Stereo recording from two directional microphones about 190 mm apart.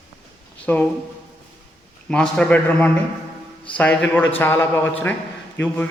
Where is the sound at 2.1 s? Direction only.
5° left (ahead or behind).